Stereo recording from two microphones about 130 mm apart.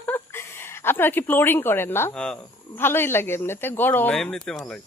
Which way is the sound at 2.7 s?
15° left (ahead or behind).